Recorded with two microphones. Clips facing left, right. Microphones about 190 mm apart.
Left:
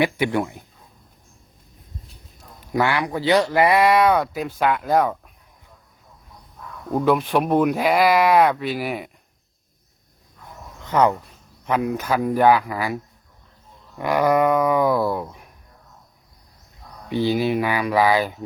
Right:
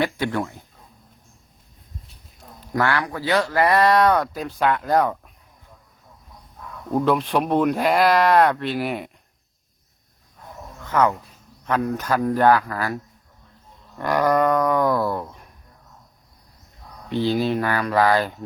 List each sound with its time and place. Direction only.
0.0 s speech: 15° left (ahead or behind)
2.7 s speech: 15° left (ahead or behind)
6.9 s speech: 5° left (ahead or behind)
10.9 s speech: 15° left (ahead or behind)
14.0 s speech: 10° left (ahead or behind)
17.1 s speech: 10° left (ahead or behind)